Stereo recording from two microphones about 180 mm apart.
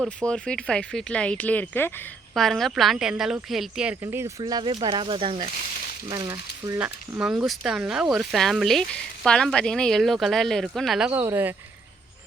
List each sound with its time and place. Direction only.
0.0 s speech: 5° left (ahead or behind)
4.0 s speech: 15° right (ahead or behind)
6.7 s speech: 5° right (ahead or behind)
11.2 s speech: 15° right (ahead or behind)